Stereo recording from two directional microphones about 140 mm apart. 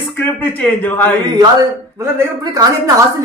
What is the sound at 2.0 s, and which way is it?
Speech, 20° right (ahead or behind).